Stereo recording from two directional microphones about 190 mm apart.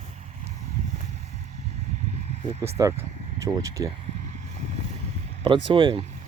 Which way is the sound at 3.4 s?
15° right (ahead or behind).